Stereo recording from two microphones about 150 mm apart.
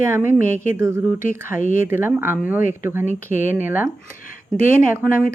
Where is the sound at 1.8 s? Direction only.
15° right (ahead or behind).